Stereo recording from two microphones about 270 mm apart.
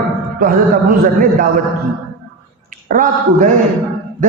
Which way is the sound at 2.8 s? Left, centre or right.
Right.